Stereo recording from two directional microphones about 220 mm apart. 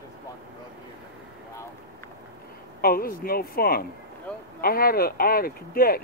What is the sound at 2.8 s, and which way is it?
Speech, 40° left (ahead or behind).